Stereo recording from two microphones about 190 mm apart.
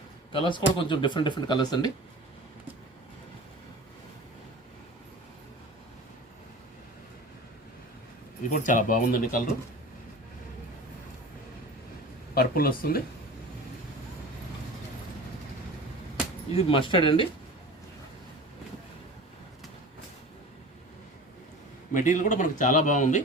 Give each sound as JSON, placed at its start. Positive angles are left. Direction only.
{"t": 0.3, "sound": "speech", "side_deg": 25}
{"t": 8.4, "sound": "speech", "side_deg": 45}
{"t": 12.3, "sound": "speech", "side_deg": 50}
{"t": 16.6, "sound": "speech", "side_deg": 30}
{"t": 21.9, "sound": "a man's voice", "side_deg": 40}